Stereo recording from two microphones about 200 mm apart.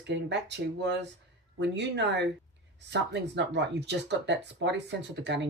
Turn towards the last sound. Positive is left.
turn(degrees=-60)  # may be behind; listen again after turning